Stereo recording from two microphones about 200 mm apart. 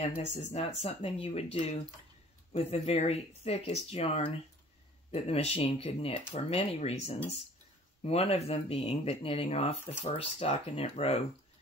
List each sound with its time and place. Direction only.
0.4 s speech: 35° left (ahead or behind)